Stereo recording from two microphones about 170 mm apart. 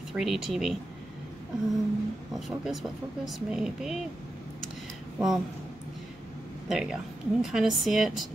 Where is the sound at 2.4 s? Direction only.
Centre (ahead or behind).